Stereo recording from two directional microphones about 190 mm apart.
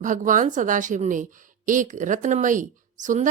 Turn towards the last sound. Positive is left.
turn(degrees=-40)  # may be behind; listen again after turning